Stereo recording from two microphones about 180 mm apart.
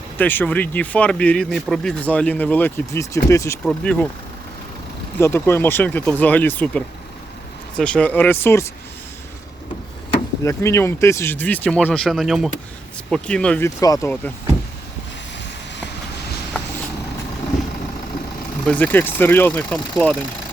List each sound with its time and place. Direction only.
0.2 s speech: 10° left (ahead or behind)
3.6 s speech: 5° left (ahead or behind)
5.2 s speech: 15° left (ahead or behind)
10.1 s speech: 15° left (ahead or behind)
13.7 s speech: 20° left (ahead or behind)
18.6 s speech: 10° left (ahead or behind)